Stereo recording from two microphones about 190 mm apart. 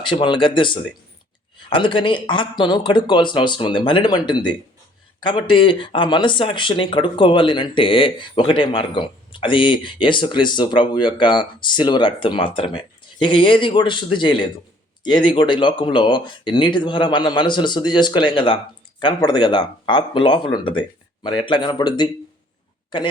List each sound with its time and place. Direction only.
0.0 s speech: 25° left (ahead or behind)